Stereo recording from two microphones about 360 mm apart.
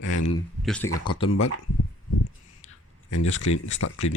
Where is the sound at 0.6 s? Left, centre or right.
Centre.